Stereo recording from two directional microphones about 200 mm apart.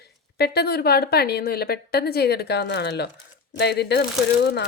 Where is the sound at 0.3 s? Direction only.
55° left (ahead or behind).